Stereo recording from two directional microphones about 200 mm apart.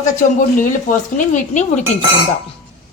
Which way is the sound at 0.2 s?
40° left (ahead or behind).